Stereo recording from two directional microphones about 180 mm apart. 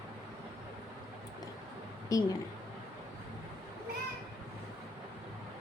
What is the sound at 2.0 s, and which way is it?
Speech, 20° left (ahead or behind).